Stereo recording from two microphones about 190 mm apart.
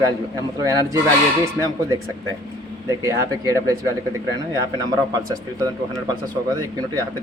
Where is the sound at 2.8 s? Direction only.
20° right (ahead or behind).